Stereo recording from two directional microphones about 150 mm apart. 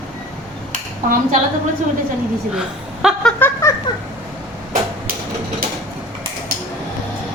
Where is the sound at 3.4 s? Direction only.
20° left (ahead or behind).